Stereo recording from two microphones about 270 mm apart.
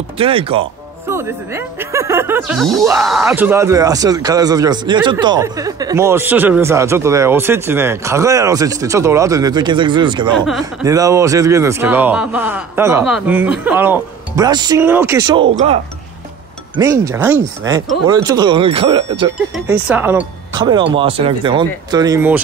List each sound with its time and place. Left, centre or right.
0.2 s speech: right
1.1 s speech: centre
10.3 s speech: centre
10.6 s speech: centre
16.7 s speech: centre
19.3 s speech: centre